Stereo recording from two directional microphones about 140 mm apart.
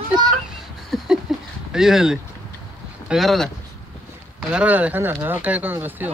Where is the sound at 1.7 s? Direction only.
5° right (ahead or behind).